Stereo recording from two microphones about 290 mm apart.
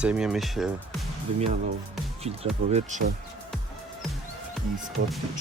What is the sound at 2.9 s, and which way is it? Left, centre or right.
Speech, right.